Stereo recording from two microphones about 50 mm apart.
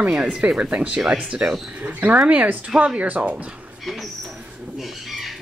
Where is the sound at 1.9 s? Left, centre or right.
Right.